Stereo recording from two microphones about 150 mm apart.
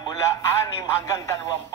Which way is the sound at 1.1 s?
20° left (ahead or behind).